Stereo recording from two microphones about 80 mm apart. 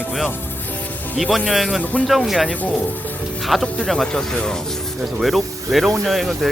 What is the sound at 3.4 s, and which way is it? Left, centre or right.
Speech, centre.